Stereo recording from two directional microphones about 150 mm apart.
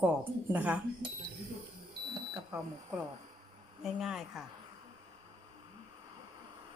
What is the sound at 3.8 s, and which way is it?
Speech, centre (ahead or behind).